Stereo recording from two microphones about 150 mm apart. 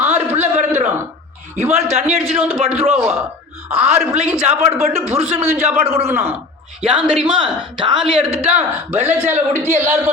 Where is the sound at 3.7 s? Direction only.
40° right (ahead or behind).